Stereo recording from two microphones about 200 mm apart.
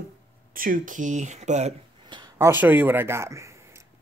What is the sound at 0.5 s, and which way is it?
Speech, 45° right (ahead or behind).